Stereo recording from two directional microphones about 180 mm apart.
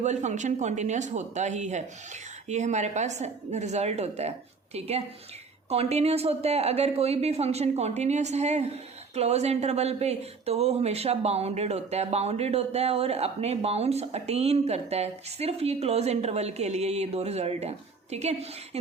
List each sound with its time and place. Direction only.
0.0 s speech: 40° right (ahead or behind)